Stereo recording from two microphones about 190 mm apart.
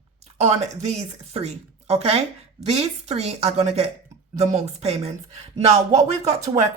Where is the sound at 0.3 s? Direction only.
35° right (ahead or behind).